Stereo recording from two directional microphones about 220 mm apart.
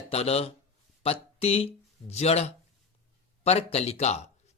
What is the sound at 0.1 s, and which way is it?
Speech, 30° left (ahead or behind).